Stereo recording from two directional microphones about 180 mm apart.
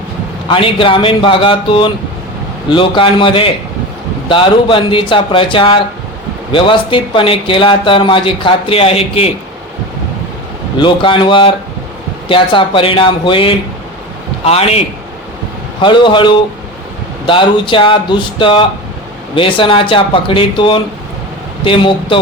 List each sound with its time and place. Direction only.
0.4 s speech: 30° left (ahead or behind)
10.8 s a man's voice: 25° left (ahead or behind)